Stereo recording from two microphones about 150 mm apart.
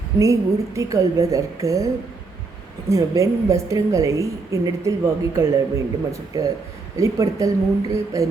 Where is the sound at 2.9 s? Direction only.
20° right (ahead or behind).